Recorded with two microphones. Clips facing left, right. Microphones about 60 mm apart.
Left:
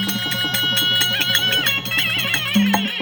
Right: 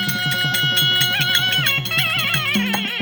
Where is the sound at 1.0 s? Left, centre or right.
Centre.